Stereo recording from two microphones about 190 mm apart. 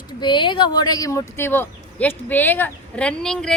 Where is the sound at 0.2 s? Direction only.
25° left (ahead or behind).